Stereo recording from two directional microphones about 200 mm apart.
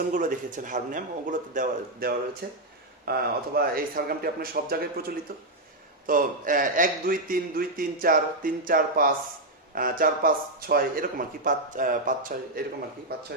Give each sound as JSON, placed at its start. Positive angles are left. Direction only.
{"t": 0.1, "sound": "speech", "side_deg": -40}
{"t": 2.4, "sound": "a man's voice", "side_deg": -55}